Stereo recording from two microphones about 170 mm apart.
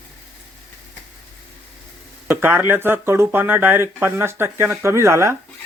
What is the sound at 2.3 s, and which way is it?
Speech, 15° right (ahead or behind).